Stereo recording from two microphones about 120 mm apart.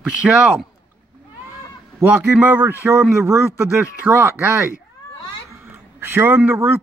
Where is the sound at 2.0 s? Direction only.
15° right (ahead or behind).